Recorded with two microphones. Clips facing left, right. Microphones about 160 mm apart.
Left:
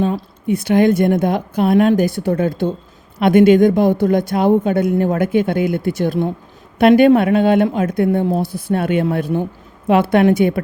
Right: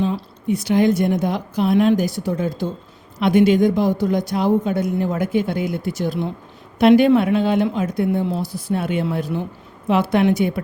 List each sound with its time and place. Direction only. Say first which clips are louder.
0.0 s speech: left 3 dB; 55° left (ahead or behind)